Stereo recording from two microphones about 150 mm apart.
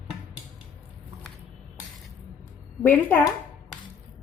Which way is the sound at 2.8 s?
15° left (ahead or behind).